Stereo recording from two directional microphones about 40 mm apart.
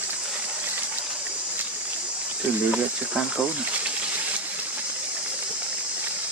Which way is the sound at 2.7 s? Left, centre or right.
Right.